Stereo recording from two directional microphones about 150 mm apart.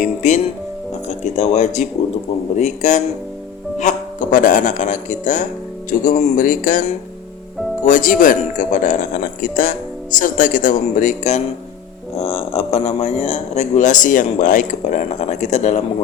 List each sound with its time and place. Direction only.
0.0 s music: 55° left (ahead or behind)
1.0 s speech: 50° left (ahead or behind)